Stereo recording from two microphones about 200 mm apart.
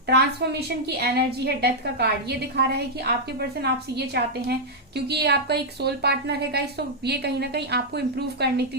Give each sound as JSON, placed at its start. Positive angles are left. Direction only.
{"t": 0.1, "sound": "a woman's voice", "side_deg": -55}